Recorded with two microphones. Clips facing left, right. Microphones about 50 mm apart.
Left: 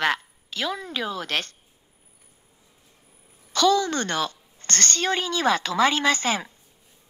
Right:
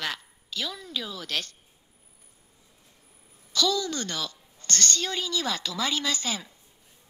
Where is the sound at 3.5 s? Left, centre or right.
Left.